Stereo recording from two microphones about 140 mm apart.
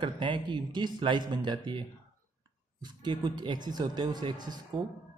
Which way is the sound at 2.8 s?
30° right (ahead or behind).